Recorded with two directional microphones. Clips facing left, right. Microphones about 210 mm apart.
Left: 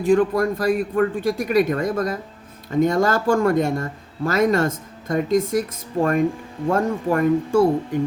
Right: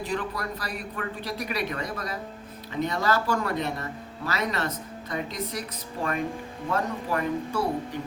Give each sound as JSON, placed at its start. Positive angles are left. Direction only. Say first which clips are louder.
{"t": 0.0, "sound": "speech", "louder": "left 14 dB", "side_deg": 50}